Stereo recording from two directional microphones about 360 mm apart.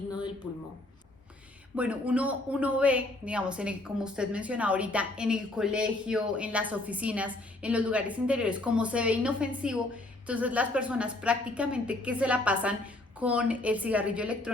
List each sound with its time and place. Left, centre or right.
1.7 s speech: centre